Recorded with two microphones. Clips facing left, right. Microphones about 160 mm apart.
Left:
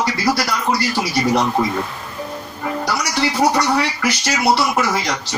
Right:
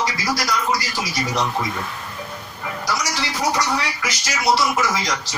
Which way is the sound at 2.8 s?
60° left (ahead or behind).